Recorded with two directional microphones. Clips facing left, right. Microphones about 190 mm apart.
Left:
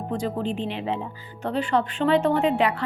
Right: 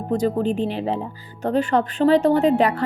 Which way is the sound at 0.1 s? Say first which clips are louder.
Right 7 dB; 40° right (ahead or behind).